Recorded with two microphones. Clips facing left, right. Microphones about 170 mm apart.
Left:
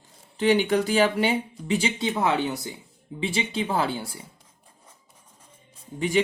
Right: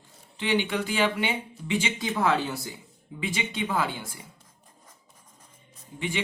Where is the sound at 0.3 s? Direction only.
40° left (ahead or behind).